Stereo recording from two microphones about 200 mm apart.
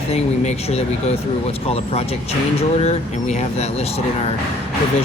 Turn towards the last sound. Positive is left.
turn(degrees=30)  # may be behind; listen again after turning